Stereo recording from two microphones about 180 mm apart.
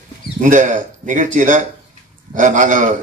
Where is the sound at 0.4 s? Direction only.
45° right (ahead or behind).